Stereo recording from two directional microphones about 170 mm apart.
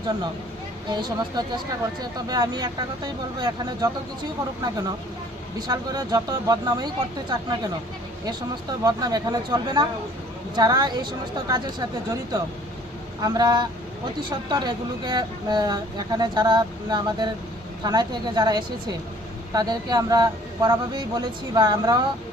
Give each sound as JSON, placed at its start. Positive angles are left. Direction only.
{"t": 0.9, "sound": "speech", "side_deg": -25}
{"t": 5.5, "sound": "speech", "side_deg": -25}
{"t": 8.8, "sound": "speech", "side_deg": -25}